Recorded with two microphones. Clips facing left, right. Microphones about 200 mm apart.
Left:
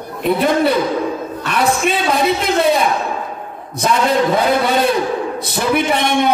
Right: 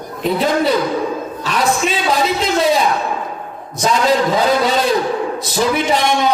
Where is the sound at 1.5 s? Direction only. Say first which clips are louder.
Left 1 dB; 60° left (ahead or behind).